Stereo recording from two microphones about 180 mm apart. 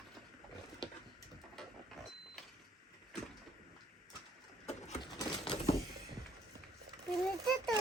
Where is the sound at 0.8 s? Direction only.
25° left (ahead or behind).